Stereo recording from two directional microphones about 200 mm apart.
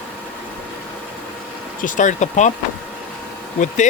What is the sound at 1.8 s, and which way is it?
Speech, 40° left (ahead or behind).